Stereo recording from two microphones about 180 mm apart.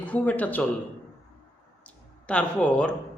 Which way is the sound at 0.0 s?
10° left (ahead or behind).